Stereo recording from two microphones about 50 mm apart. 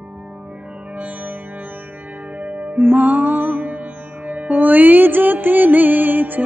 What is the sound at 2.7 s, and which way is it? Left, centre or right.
Music, right.